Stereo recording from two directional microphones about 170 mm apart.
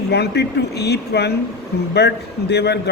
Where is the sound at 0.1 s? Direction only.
75° left (ahead or behind).